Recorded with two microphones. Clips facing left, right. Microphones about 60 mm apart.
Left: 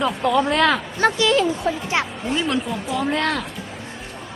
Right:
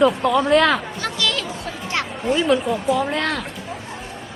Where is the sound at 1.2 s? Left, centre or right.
Left.